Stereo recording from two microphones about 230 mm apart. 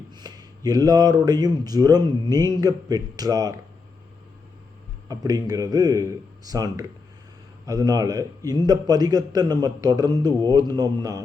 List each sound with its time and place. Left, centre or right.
0.1 s a man's voice: centre
5.0 s a man's voice: centre